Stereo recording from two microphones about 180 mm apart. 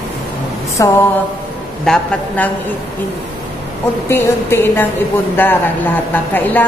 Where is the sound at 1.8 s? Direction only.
5° left (ahead or behind).